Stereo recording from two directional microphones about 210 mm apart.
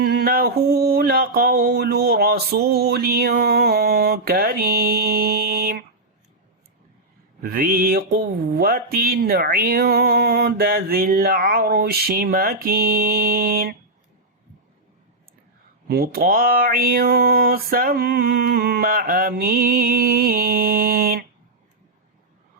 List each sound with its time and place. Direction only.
0.0 s speech: 50° right (ahead or behind)
7.4 s speech: 45° right (ahead or behind)
15.9 s speech: 45° right (ahead or behind)